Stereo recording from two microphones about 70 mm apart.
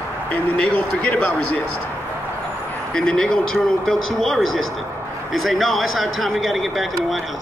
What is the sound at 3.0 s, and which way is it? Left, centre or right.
A man's voice, centre.